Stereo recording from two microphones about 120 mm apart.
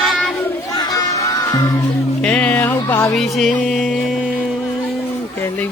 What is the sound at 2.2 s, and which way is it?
Music, 10° left (ahead or behind).